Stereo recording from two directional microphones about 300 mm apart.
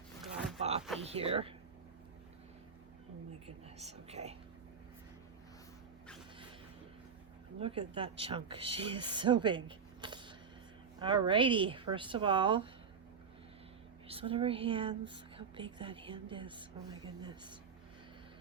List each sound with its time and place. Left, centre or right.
0.2 s a sound: centre
1.0 s speech: centre
3.4 s speech: right
7.6 s a woman's voice: centre
14.1 s a woman's voice: centre